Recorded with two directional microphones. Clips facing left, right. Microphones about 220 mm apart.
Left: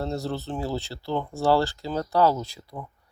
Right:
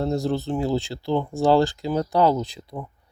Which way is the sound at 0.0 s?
15° right (ahead or behind).